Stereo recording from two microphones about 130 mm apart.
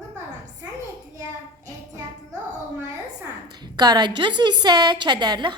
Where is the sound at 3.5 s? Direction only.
30° right (ahead or behind).